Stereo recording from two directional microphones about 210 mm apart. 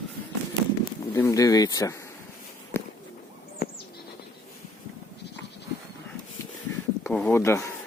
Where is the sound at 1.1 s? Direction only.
15° left (ahead or behind).